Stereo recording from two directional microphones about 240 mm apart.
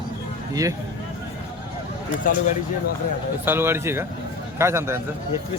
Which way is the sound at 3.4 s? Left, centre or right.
Centre.